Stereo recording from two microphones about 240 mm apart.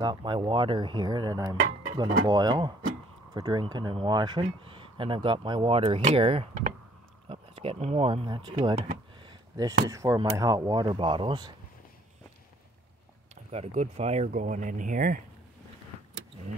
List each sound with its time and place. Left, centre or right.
0.0 s speech: centre
13.3 s speech: right